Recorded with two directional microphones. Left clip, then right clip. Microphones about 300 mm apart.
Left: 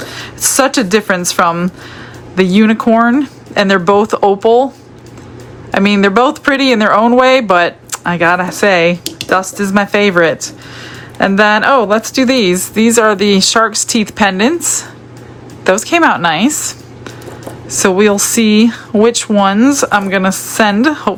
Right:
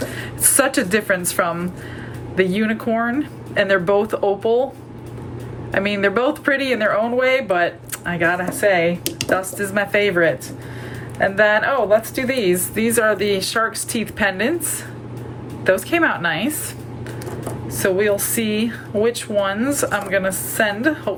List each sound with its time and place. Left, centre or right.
0.1 s speech: centre
5.7 s speech: centre
15.6 s speech: centre
17.7 s speech: centre